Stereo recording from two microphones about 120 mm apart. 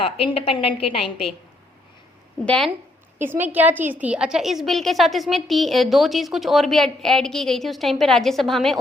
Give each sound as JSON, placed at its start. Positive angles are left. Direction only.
{"t": 0.0, "sound": "a woman's voice", "side_deg": 50}
{"t": 3.2, "sound": "a woman's voice", "side_deg": -15}